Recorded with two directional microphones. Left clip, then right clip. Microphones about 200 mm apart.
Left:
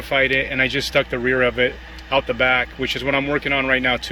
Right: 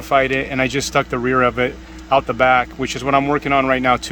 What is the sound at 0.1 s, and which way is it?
Speech, 15° right (ahead or behind).